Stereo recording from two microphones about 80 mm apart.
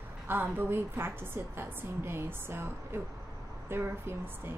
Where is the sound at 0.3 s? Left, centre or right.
Right.